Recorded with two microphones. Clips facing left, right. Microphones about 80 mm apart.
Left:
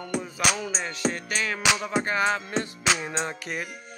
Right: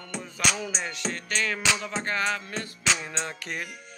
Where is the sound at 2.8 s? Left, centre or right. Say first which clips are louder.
Even; centre.